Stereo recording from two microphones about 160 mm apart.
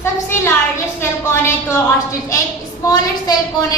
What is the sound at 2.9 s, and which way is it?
Speech, 25° left (ahead or behind).